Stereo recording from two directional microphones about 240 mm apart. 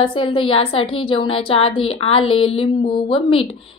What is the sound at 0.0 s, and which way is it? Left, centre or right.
A woman's voice, left.